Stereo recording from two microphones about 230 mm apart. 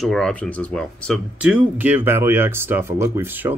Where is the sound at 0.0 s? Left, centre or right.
Centre.